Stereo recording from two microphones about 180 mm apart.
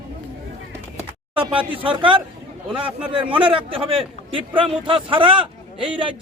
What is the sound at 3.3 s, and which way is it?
A man's voice, 30° right (ahead or behind).